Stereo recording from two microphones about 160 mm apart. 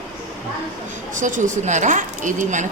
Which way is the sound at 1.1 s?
50° right (ahead or behind).